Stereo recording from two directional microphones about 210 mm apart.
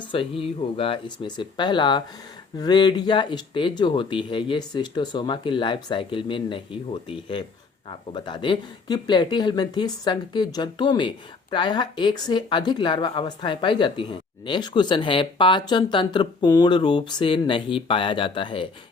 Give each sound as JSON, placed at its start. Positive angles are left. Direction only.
{"t": 0.0, "sound": "speech", "side_deg": 25}